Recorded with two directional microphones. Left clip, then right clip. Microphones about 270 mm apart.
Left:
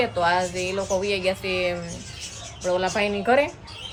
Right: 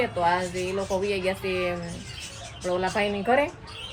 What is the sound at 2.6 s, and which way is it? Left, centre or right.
Speech, centre.